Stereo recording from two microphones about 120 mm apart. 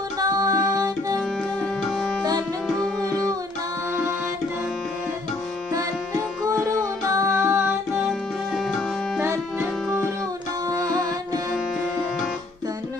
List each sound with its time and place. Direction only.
0.2 s music: 30° right (ahead or behind)
7.1 s music: 25° right (ahead or behind)
10.7 s music: 35° right (ahead or behind)